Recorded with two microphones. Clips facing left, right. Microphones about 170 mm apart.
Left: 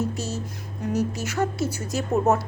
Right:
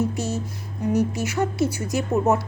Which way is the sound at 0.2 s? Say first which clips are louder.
Right 4 dB; 55° right (ahead or behind).